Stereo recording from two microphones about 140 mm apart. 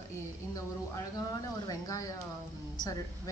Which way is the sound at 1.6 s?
25° left (ahead or behind).